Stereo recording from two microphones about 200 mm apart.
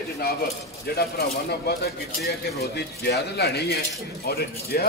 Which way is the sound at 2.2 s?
50° left (ahead or behind).